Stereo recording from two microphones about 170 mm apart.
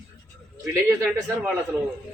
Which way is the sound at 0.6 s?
20° right (ahead or behind).